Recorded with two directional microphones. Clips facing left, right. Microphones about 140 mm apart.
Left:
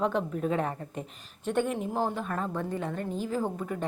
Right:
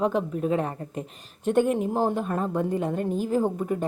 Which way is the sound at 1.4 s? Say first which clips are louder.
Right 6 dB; 15° right (ahead or behind).